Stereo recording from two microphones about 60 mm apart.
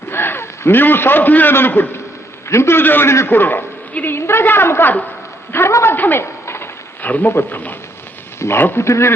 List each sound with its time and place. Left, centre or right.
0.1 s a man's voice: left
2.5 s a woman's voice: left
5.9 s a sound: left
7.1 s a woman's voice: left